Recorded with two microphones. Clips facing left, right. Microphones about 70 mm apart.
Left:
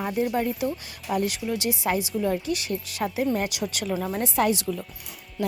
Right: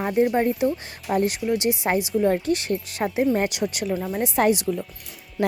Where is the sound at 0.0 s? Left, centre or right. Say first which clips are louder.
Right 5 dB; right.